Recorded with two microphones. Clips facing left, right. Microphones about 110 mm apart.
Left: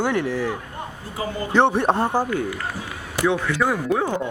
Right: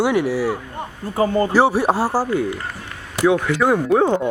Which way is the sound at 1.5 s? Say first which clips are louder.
Left 2 dB; 5° right (ahead or behind).